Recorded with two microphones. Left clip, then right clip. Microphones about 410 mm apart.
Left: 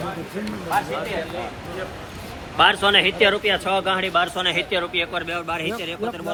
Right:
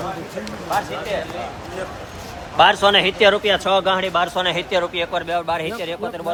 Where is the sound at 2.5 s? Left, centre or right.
Right.